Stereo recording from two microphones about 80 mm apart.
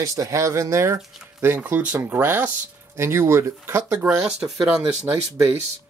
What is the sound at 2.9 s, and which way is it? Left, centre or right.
Speech, right.